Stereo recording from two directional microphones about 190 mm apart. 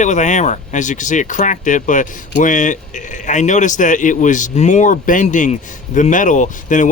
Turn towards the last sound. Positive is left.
turn(degrees=40)  # may be behind; listen again after turning